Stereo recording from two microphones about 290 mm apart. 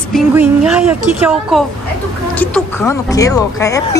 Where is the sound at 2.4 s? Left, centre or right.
Centre.